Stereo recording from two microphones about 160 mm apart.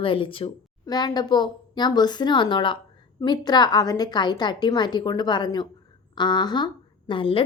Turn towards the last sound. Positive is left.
turn(degrees=30)  # may be behind; listen again after turning